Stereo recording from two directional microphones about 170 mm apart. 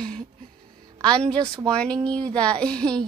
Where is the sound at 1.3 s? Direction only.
25° right (ahead or behind).